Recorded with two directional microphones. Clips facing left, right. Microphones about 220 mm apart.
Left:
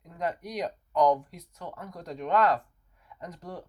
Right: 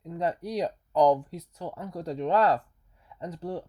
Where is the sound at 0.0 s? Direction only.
30° right (ahead or behind).